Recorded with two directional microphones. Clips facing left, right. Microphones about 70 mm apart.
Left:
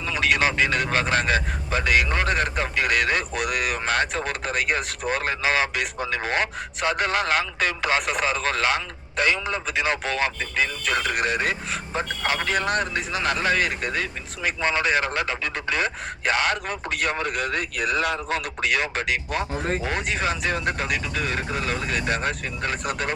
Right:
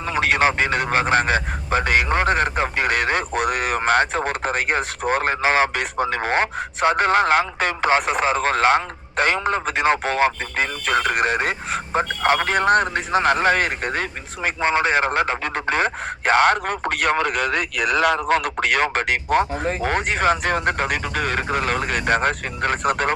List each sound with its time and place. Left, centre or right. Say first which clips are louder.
0.0 s a man's voice: right 3 dB; right